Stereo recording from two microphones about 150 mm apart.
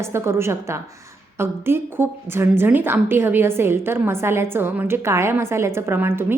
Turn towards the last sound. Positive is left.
turn(degrees=-15)  # may be behind; listen again after turning